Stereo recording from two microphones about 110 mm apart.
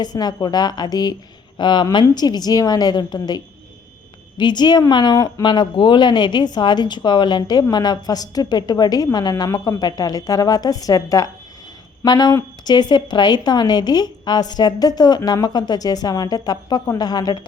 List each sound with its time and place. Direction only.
0.0 s a woman's voice: 40° left (ahead or behind)